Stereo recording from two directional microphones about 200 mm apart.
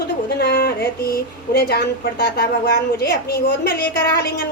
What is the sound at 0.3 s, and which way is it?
A woman's voice, 50° left (ahead or behind).